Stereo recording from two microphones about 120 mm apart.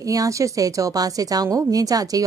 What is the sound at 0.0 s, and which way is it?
A woman's voice, 30° right (ahead or behind).